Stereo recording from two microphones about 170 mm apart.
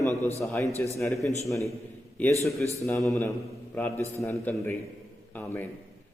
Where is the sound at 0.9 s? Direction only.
15° left (ahead or behind).